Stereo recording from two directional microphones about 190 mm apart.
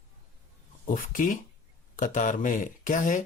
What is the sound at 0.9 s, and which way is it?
Speech, 45° left (ahead or behind).